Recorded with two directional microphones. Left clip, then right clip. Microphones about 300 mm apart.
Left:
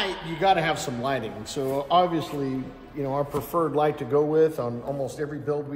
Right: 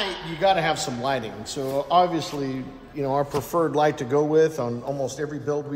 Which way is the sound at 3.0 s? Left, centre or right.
Right.